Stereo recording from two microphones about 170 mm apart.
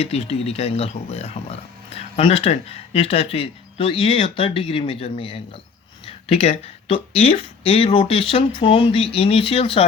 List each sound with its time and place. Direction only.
0.0 s speech: 35° left (ahead or behind)